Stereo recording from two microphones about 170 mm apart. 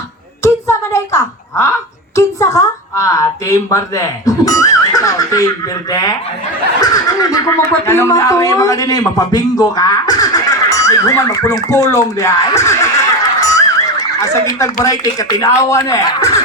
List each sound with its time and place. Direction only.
0.4 s a woman's voice: 15° left (ahead or behind)